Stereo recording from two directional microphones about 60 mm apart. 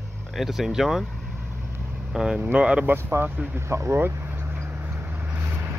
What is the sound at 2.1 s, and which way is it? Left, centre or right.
Speech, centre.